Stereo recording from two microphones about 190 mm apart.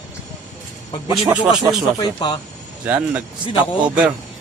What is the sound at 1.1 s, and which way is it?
Speech, 10° right (ahead or behind).